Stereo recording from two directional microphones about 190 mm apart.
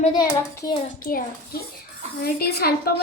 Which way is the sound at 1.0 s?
50° left (ahead or behind).